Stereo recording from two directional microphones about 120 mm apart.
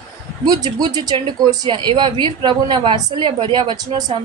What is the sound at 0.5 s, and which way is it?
A woman's voice, 35° right (ahead or behind).